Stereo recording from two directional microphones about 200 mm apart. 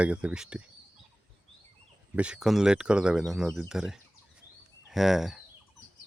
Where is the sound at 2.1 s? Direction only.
5° right (ahead or behind).